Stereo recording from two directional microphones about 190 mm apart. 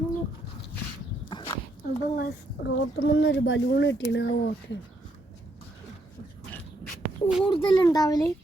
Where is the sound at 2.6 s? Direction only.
85° left; by 4.8 s 65° left (ahead or behind).